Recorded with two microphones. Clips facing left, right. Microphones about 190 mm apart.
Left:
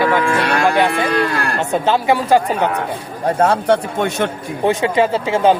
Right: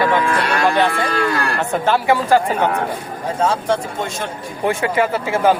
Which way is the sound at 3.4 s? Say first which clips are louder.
Left 4 dB; 65° left (ahead or behind).